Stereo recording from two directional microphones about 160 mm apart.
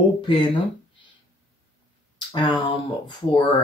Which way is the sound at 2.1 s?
30° left (ahead or behind).